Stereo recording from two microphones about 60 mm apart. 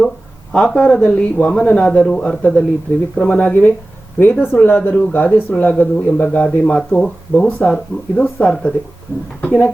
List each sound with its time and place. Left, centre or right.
0.5 s speech: centre
2.0 s speech: centre
2.2 s speech: centre